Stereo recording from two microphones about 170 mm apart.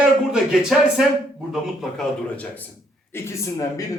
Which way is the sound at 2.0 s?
10° left (ahead or behind).